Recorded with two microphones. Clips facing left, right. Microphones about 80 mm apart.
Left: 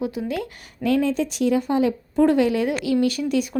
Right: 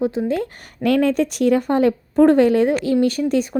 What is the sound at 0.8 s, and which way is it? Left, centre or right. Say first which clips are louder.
A woman's voice: right 4 dB; right.